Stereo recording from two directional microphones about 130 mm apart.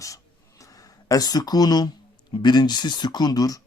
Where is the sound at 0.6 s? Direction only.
25° left (ahead or behind).